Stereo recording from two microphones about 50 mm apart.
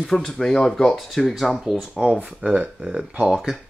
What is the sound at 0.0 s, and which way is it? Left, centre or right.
Speech, centre.